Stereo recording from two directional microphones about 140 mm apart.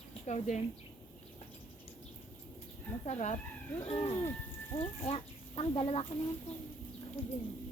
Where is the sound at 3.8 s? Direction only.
40° left (ahead or behind).